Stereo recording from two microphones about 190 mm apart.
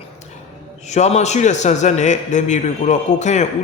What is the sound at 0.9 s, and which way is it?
A man's voice, 35° left (ahead or behind).